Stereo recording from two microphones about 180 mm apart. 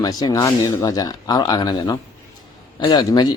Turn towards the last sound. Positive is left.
turn(degrees=25)  # may be behind; listen again after turning